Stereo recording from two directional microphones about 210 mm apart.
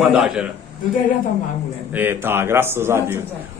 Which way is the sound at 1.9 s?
10° right (ahead or behind).